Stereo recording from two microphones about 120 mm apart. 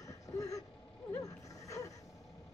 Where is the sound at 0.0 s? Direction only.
30° left (ahead or behind).